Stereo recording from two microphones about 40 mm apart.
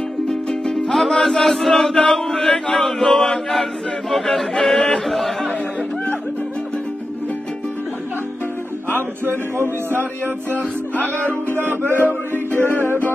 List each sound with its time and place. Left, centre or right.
0.3 s music: centre
1.2 s chant: centre
4.1 s speech: centre
8.9 s a sound: right
11.8 s music: left
12.1 s music: right